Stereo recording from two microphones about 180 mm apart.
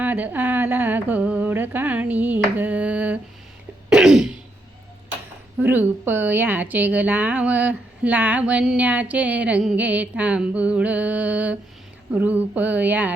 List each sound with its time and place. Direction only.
0.0 s a sound: 10° right (ahead or behind)
3.8 s throat clearing: 5° right (ahead or behind)
5.5 s a woman's voice: 10° right (ahead or behind)